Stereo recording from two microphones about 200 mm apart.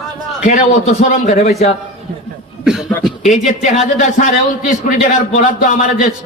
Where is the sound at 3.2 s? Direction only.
40° left (ahead or behind).